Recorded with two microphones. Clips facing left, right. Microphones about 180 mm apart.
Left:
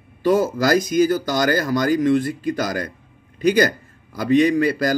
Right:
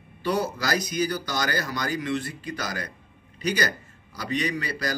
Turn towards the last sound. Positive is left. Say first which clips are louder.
# left 11 dB
turn(degrees=50)  # may be behind; listen again after turning